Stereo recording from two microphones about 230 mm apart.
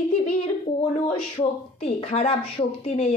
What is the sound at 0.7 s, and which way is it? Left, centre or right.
A woman's voice, left.